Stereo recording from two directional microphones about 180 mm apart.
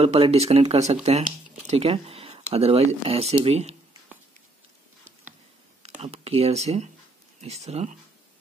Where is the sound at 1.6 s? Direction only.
35° right (ahead or behind).